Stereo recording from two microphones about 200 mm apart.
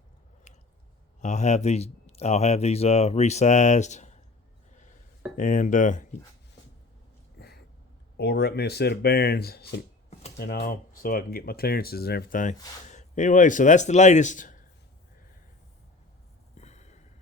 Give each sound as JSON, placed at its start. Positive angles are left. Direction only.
{"t": 0.5, "sound": "squish", "side_deg": 35}
{"t": 1.2, "sound": "speech", "side_deg": 35}
{"t": 5.4, "sound": "speech", "side_deg": 40}
{"t": 7.3, "sound": "a sound", "side_deg": 55}
{"t": 8.1, "sound": "speech", "side_deg": 55}
{"t": 16.6, "sound": "a sound", "side_deg": 35}